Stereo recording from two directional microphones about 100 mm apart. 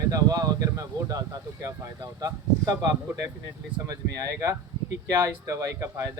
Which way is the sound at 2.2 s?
35° right (ahead or behind).